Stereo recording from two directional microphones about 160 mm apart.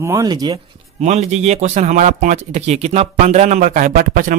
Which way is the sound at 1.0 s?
45° right (ahead or behind).